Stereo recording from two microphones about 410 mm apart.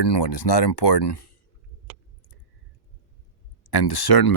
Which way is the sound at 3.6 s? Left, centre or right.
Left.